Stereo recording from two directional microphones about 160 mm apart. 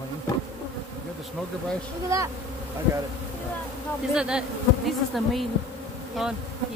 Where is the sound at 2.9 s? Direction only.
15° right (ahead or behind).